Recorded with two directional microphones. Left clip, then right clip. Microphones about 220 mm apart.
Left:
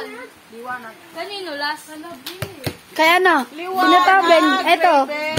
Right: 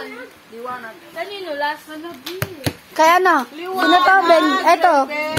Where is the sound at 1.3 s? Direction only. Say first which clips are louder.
Right 2 dB; 25° left (ahead or behind).